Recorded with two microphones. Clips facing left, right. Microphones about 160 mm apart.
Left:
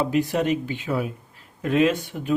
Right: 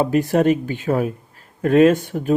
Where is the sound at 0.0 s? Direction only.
45° right (ahead or behind).